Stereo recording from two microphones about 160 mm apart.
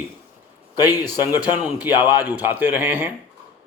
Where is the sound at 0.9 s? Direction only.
15° right (ahead or behind).